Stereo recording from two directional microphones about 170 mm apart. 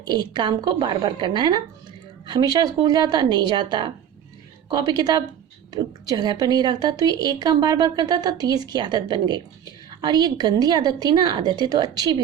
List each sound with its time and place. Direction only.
0.0 s a woman's voice: 25° right (ahead or behind)